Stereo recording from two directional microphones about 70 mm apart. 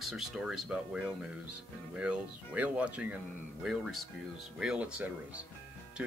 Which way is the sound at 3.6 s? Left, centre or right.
Centre.